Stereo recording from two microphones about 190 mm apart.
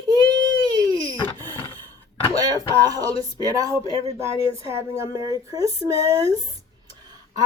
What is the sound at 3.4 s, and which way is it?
Speech, 20° right (ahead or behind).